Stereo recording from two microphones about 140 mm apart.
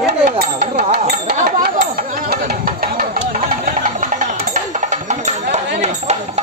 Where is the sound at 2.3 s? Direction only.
90° right.